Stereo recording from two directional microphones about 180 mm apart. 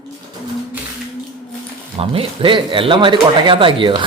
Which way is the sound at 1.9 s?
30° right (ahead or behind).